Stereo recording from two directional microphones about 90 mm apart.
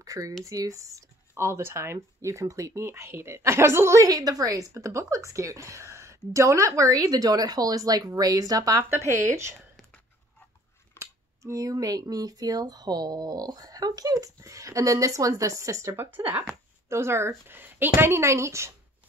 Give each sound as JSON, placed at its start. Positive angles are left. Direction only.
{"t": 0.0, "sound": "speech", "side_deg": -40}
{"t": 4.1, "sound": "speech", "side_deg": -45}
{"t": 11.0, "sound": "speech", "side_deg": -35}